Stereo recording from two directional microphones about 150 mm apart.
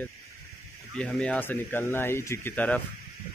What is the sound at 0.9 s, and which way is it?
Speech, 5° left (ahead or behind).